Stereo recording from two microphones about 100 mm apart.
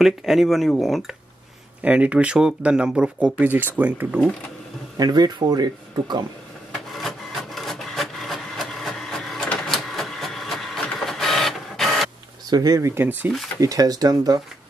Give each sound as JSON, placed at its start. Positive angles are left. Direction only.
{"t": 0.0, "sound": "speech", "side_deg": 0}
{"t": 1.8, "sound": "speech", "side_deg": -15}
{"t": 4.9, "sound": "speech", "side_deg": -40}
{"t": 6.9, "sound": "wood", "side_deg": 0}
{"t": 12.4, "sound": "speech", "side_deg": -40}
{"t": 13.6, "sound": "speech", "side_deg": -35}